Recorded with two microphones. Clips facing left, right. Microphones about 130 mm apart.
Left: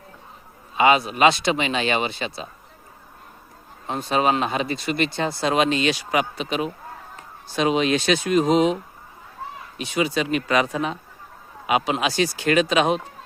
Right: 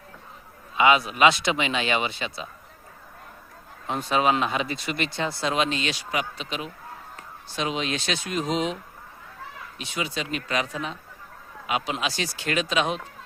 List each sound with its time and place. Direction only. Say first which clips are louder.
0.8 s speech: left 2 dB; 40° left (ahead or behind)
3.8 s speech: left 2 dB; 35° left (ahead or behind); by 5.7 s 50° left (ahead or behind)
5.7 s speech: left 7 dB; 5° left (ahead or behind)
6.1 s speech: left 6 dB; 55° left (ahead or behind)
9.9 s speech: left 8 dB; 65° left (ahead or behind)